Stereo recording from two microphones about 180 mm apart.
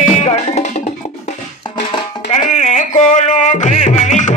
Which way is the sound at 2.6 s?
40° left (ahead or behind).